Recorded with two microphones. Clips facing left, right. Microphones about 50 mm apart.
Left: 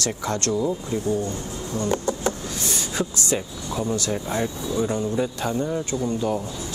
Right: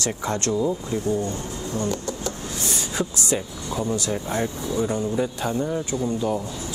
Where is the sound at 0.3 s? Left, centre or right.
Right.